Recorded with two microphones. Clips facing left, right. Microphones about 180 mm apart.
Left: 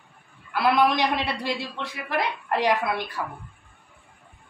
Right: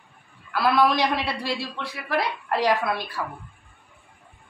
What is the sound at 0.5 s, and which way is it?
A woman's voice, 20° left (ahead or behind).